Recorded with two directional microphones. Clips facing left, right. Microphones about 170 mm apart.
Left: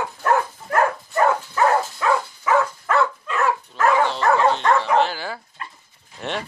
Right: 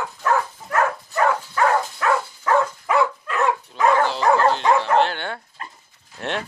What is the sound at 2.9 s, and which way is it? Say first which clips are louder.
Dog: right 1 dB; 5° right (ahead or behind).